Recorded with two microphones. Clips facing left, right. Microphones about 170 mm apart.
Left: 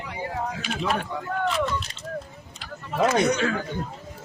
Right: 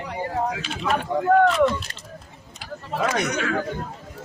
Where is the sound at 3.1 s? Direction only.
30° left (ahead or behind).